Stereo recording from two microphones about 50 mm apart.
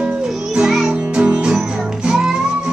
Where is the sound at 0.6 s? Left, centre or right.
Centre.